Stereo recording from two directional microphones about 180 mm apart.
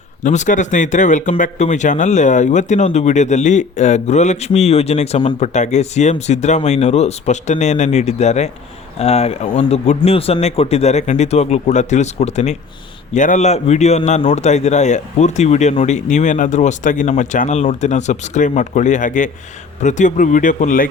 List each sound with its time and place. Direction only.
0.2 s speech: 45° left (ahead or behind)